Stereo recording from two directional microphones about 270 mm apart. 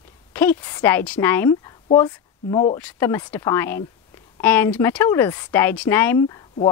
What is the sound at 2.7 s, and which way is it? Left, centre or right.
Speech, centre.